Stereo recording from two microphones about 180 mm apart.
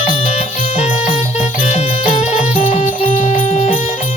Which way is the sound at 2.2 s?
40° left (ahead or behind).